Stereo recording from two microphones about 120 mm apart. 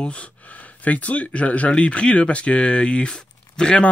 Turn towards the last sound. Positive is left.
turn(degrees=10)  # may be behind; listen again after turning